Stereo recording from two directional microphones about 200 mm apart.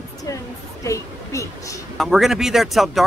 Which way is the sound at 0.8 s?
15° left (ahead or behind).